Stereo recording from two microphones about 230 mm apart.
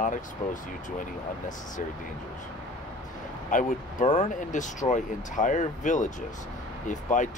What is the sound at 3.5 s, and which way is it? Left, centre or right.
Speech, left.